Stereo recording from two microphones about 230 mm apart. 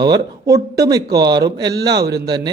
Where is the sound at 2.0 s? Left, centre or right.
Right.